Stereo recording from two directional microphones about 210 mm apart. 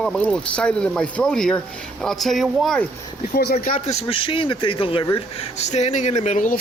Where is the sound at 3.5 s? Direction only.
35° left (ahead or behind).